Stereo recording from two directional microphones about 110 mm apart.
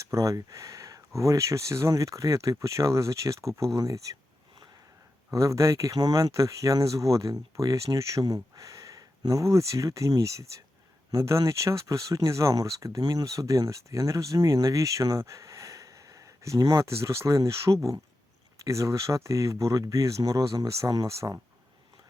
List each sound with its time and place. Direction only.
0.0 s speech: 30° right (ahead or behind)
5.3 s speech: 30° right (ahead or behind)